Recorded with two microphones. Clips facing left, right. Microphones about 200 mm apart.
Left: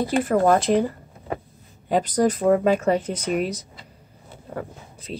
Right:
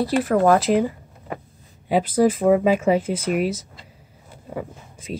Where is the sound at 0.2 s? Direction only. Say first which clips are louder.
Right 1 dB; 5° right (ahead or behind).